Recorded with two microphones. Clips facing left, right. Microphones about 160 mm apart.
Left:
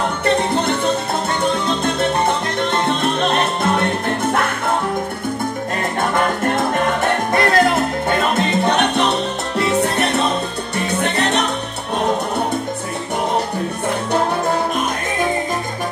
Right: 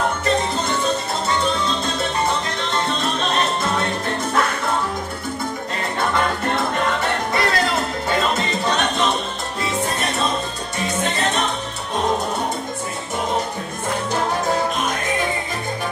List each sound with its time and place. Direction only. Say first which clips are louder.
0.2 s music: left 4 dB; 65° left (ahead or behind)
2.0 s music: left 4 dB; 60° left (ahead or behind)
5.9 s music: left 2 dB; 50° left (ahead or behind)
7.3 s salsa music: left 7 dB; 55° left (ahead or behind)